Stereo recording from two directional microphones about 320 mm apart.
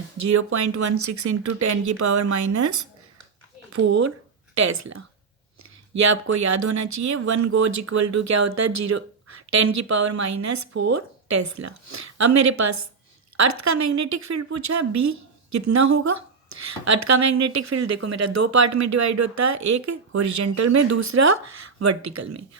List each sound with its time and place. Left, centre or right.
0.2 s speech: right
5.9 s speech: right